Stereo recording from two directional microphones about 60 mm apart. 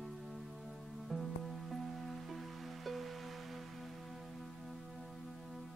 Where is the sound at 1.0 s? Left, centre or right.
Centre.